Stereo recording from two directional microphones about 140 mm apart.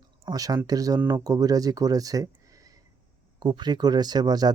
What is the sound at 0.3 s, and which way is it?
Speech, 25° right (ahead or behind).